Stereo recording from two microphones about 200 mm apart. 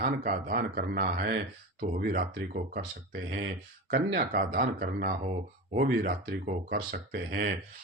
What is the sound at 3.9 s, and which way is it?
Speech, 45° right (ahead or behind).